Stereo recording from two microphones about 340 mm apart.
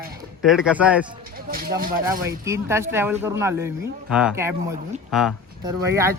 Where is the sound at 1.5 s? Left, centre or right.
Right.